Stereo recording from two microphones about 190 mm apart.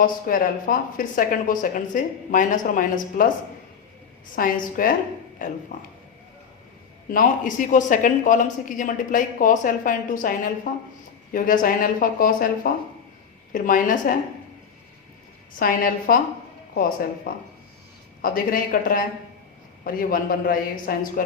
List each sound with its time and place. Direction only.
0.0 s speech: 45° left (ahead or behind)
4.4 s speech: 45° left (ahead or behind)
7.1 s speech: 45° left (ahead or behind)
13.5 s speech: 45° left (ahead or behind)
15.5 s speech: 50° left (ahead or behind)
17.3 s speech: 50° left (ahead or behind)